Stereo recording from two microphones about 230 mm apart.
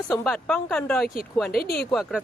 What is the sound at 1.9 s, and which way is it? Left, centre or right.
Speech, centre.